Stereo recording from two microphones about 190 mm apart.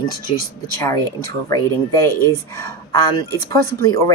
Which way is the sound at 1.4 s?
15° left (ahead or behind).